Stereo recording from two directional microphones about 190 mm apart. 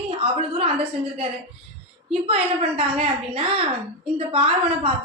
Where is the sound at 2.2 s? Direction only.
30° right (ahead or behind).